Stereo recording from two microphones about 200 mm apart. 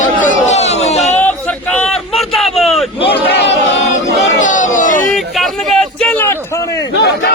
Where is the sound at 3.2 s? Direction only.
55° left (ahead or behind).